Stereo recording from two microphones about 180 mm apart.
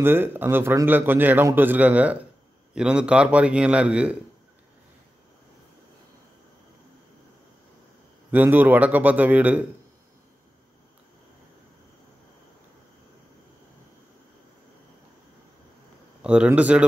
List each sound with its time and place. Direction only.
0.0 s a man's voice: 10° right (ahead or behind)
8.3 s a man's voice: 10° right (ahead or behind)
16.2 s a man's voice: 5° right (ahead or behind)